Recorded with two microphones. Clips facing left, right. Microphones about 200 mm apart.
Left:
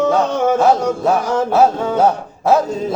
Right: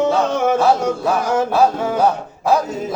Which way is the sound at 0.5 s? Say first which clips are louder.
Left 2 dB; 20° left (ahead or behind).